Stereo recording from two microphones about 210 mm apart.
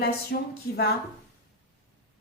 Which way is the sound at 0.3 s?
50° left (ahead or behind).